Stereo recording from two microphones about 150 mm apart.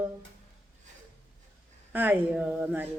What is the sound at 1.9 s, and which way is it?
Speech, 10° right (ahead or behind).